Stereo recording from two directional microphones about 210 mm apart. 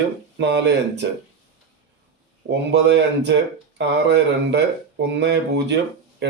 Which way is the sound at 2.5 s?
55° right (ahead or behind).